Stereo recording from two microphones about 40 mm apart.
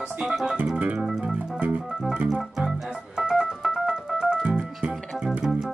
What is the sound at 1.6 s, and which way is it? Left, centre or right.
Organ, right.